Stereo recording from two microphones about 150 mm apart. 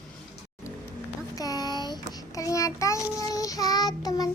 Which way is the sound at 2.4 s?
20° left (ahead or behind).